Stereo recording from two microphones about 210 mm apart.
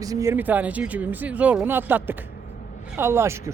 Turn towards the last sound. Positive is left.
turn(degrees=-10)  # may be behind; listen again after turning